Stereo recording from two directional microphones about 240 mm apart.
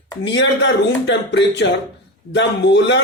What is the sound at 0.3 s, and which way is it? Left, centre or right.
Speech, left.